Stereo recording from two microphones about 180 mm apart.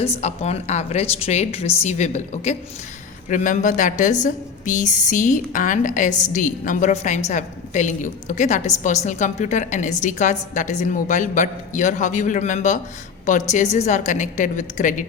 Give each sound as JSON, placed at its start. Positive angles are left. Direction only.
{"t": 0.0, "sound": "a woman's voice", "side_deg": 35}